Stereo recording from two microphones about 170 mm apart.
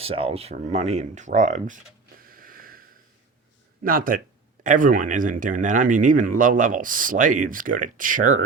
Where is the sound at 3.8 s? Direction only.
55° right (ahead or behind).